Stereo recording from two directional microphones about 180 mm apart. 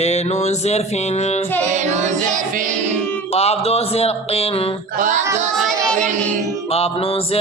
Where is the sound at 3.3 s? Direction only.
35° left (ahead or behind).